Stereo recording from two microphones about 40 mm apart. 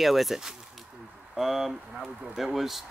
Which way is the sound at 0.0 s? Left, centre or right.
Centre.